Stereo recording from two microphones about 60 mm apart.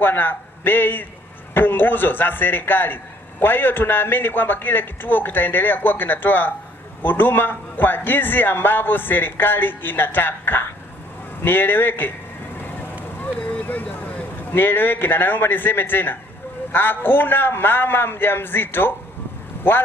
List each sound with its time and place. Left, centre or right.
0.0 s a man's voice: left
13.2 s vehicle: left
14.5 s a man's voice: left